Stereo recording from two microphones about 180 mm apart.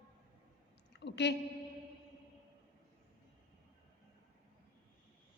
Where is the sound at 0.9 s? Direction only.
75° left (ahead or behind).